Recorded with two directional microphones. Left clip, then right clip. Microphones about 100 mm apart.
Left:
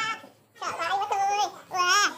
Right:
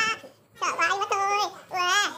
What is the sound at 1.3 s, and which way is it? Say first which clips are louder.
Babbling: right 1 dB; 25° right (ahead or behind).